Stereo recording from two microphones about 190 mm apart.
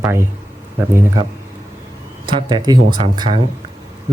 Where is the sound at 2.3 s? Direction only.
25° right (ahead or behind).